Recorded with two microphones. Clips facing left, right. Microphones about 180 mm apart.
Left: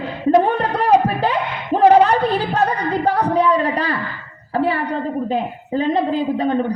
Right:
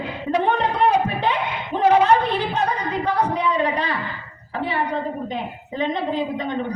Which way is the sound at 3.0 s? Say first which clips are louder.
Left 5 dB; 35° left (ahead or behind).